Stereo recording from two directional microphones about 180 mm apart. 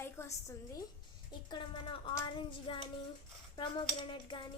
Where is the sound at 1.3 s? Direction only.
25° left (ahead or behind).